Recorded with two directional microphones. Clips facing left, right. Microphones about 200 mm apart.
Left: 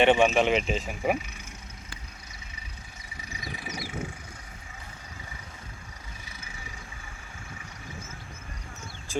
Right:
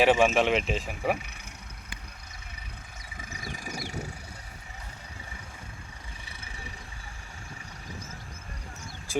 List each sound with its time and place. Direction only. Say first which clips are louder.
0.0 s speech: left 1 dB; centre (ahead or behind)
3.2 s vehicle: even; 45° right (ahead or behind)
6.2 s vehicle: right 1 dB; 30° right (ahead or behind)